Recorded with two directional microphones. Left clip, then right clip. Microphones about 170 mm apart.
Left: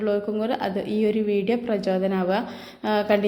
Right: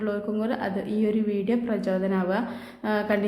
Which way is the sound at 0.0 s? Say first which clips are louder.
Left 4 dB; 5° left (ahead or behind).